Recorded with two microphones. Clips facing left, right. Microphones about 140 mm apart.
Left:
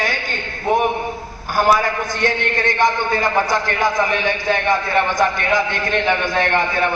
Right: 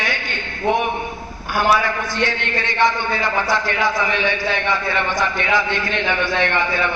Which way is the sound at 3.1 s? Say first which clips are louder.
Left 2 dB; 50° left (ahead or behind).